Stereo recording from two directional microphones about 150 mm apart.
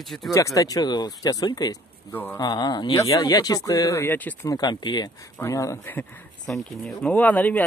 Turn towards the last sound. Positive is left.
turn(degrees=10)  # may be behind; listen again after turning